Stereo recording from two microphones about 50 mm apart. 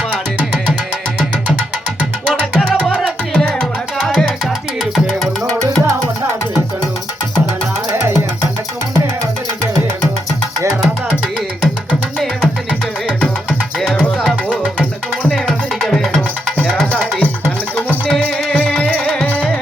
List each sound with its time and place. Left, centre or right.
2.2 s music: centre
2.9 s music: centre
13.1 s music: centre
15.4 s music: centre
18.2 s music: left